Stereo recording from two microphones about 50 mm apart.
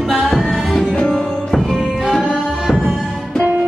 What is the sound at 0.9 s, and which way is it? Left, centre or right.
Music, centre.